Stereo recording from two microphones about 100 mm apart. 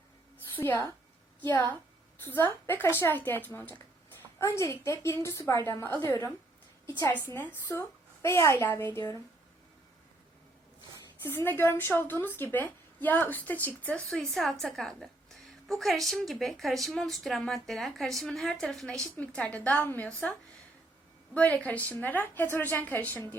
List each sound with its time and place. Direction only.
0.5 s a woman's voice: 25° left (ahead or behind)
11.2 s a woman's voice: 25° left (ahead or behind)
21.3 s a woman's voice: 10° left (ahead or behind)